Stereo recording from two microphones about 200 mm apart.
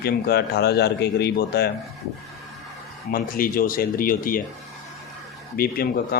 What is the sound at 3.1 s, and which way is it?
Speech, 45° left (ahead or behind).